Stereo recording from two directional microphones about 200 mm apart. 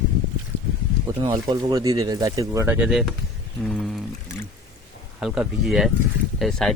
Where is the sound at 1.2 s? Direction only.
20° right (ahead or behind); by 4.0 s centre (ahead or behind).